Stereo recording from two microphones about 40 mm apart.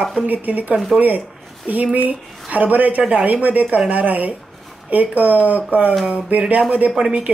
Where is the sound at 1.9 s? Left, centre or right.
Right.